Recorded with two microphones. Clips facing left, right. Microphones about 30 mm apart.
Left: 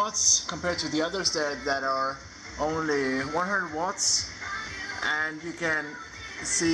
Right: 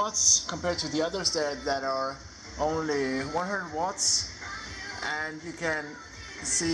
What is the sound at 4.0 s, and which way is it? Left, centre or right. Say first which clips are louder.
Speech: left 1 dB; centre.